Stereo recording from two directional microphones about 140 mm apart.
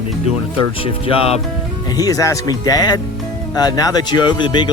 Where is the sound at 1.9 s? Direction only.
25° left (ahead or behind).